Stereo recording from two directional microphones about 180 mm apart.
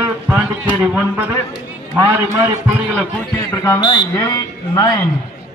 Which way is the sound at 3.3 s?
20° left (ahead or behind).